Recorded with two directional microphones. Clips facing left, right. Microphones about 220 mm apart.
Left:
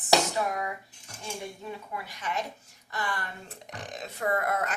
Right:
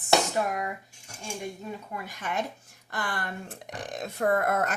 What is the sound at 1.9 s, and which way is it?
Speech, 50° right (ahead or behind).